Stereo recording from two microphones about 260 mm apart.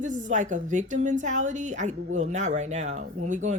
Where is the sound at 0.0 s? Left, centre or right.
Right.